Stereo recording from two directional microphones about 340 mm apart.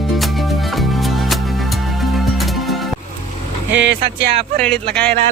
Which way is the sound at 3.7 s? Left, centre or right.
Right.